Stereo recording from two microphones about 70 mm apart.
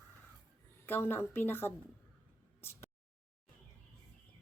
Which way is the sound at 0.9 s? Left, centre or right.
Left.